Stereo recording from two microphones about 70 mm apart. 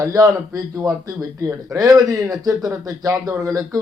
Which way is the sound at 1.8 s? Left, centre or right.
Right.